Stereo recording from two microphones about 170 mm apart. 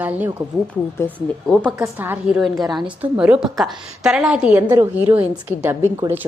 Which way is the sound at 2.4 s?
Centre (ahead or behind).